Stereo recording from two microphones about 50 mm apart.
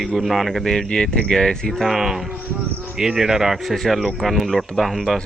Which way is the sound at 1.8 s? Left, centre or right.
Centre.